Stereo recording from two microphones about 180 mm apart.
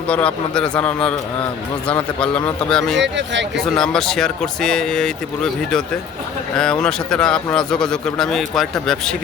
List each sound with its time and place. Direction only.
0.1 s a man's voice: 5° left (ahead or behind)
2.2 s a man's voice: 5° left (ahead or behind)
3.0 s speech: 80° right
3.6 s a man's voice: 5° left (ahead or behind)